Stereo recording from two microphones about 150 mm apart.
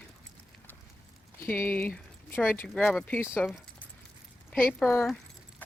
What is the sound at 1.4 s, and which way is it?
Speech, 15° left (ahead or behind).